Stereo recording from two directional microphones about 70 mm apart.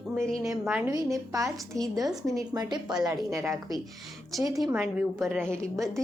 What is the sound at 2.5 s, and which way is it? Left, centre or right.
Speech, right.